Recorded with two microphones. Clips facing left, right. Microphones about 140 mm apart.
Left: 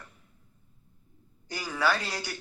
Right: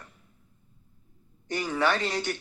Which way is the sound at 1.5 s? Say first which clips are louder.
Right 2 dB; 20° right (ahead or behind).